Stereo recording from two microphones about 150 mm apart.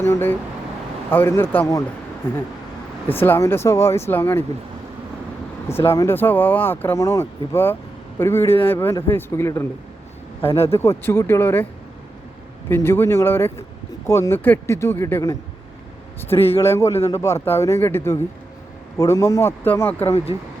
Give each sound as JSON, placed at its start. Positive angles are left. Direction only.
{"t": 0.0, "sound": "speech", "side_deg": 15}
{"t": 3.1, "sound": "speech", "side_deg": 15}
{"t": 5.6, "sound": "speech", "side_deg": 15}
{"t": 10.8, "sound": "speech", "side_deg": 15}
{"t": 12.6, "sound": "speech", "side_deg": 15}
{"t": 16.6, "sound": "a man's voice", "side_deg": 20}